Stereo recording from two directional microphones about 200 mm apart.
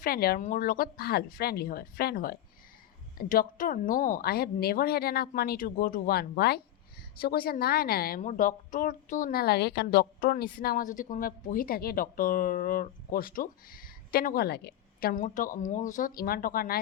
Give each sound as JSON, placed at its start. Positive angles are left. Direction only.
{"t": 0.0, "sound": "a woman's voice", "side_deg": 50}